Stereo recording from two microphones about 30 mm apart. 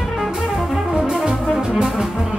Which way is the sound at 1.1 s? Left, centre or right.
Centre.